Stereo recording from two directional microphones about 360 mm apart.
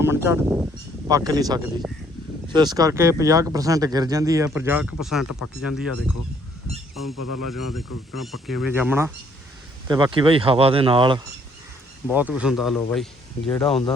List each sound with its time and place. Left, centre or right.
0.0 s speech: centre
7.1 s speech: left
8.2 s speech: centre